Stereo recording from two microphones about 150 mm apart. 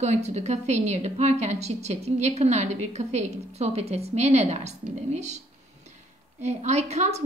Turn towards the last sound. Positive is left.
turn(degrees=-45)  # may be behind; listen again after turning